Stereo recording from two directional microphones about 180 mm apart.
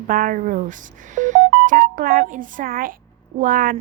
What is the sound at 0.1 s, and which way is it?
A woman's voice, 50° right (ahead or behind).